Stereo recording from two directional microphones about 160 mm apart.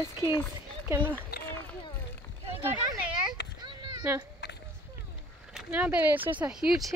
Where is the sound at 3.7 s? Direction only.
25° right (ahead or behind).